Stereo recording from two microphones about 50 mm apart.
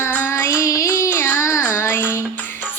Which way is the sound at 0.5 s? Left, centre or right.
Left.